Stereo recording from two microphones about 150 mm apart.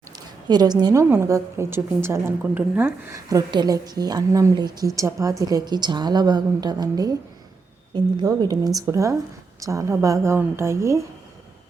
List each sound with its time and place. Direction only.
0.4 s a woman's voice: 30° right (ahead or behind)
3.2 s a woman's voice: 25° right (ahead or behind)